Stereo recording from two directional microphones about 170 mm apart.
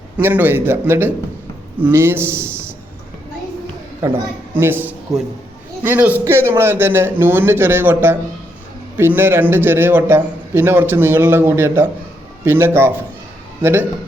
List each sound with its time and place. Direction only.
0.2 s a man's voice: 10° right (ahead or behind)
4.5 s a man's voice: 10° right (ahead or behind)